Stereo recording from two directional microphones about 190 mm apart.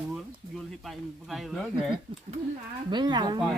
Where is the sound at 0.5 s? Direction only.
Centre (ahead or behind).